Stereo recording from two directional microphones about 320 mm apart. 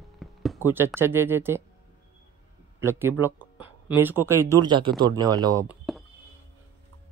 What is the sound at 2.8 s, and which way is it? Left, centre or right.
Speech, centre.